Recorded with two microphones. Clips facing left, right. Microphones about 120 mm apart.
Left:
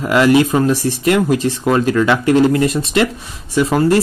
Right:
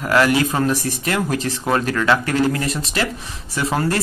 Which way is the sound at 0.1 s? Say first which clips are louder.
Left 5 dB; 20° left (ahead or behind).